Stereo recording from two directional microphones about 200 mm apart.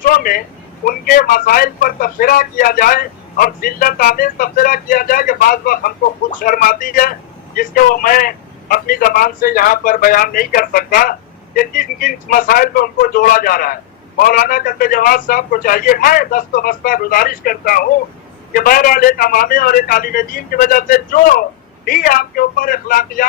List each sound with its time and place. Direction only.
0.0 s a man's voice: 45° left (ahead or behind)